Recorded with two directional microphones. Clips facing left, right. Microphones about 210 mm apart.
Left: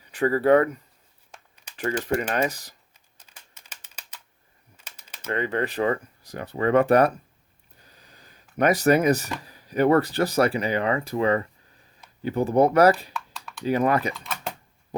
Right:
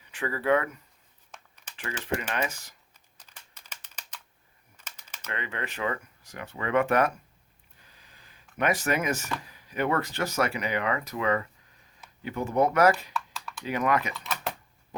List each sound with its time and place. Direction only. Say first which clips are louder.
0.1 s speech: left 7 dB; 40° left (ahead or behind)
1.7 s typing: left 11 dB; 40° left (ahead or behind)
2.0 s speech: left 4 dB; 40° left (ahead or behind)
3.7 s typing: right 1 dB; 10° left (ahead or behind)
5.3 s speech: left 10 dB; 40° left (ahead or behind)
13.1 s a sound: right 1 dB; centre (ahead or behind)
13.7 s speech: left 5 dB; 35° left (ahead or behind)
14.1 s typing: left 1 dB; centre (ahead or behind)